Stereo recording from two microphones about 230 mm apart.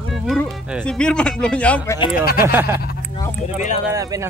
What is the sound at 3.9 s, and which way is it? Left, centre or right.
Speech, centre.